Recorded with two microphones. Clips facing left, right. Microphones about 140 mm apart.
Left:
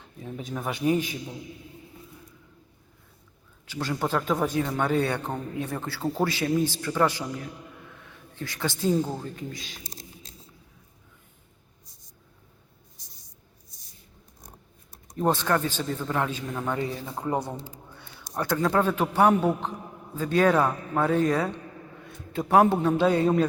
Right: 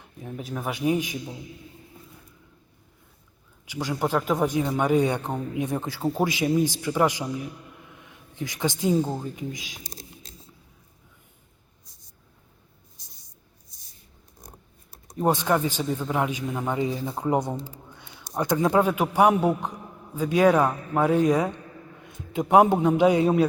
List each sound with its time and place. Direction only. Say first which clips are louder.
0.2 s speech: right 1 dB; 5° right (ahead or behind)
0.9 s speech: even; 15° right (ahead or behind)
3.7 s speech: right 2 dB; 15° right (ahead or behind)
15.1 s speech: right 2 dB; 10° right (ahead or behind)